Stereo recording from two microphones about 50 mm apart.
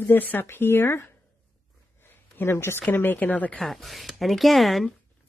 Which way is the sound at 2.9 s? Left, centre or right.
Left.